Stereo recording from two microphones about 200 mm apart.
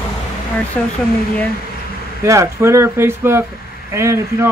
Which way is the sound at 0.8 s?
5° left (ahead or behind).